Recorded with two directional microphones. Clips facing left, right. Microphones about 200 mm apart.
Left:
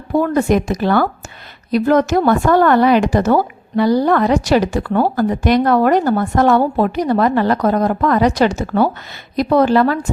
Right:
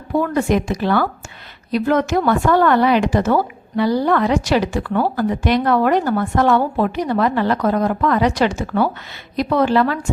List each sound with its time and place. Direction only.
0.2 s speech: 45° left (ahead or behind)